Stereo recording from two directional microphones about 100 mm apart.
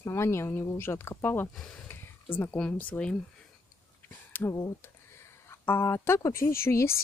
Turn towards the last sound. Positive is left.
turn(degrees=25)  # may be behind; listen again after turning